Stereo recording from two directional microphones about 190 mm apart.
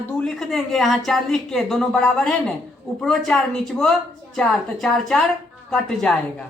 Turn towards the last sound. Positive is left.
turn(degrees=0)  # may be behind; listen again after turning